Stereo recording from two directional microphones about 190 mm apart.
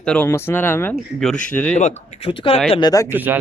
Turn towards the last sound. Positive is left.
turn(degrees=-10)  # may be behind; listen again after turning